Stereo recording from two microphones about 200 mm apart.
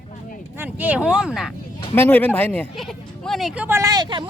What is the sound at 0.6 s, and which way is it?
Speech, 10° right (ahead or behind).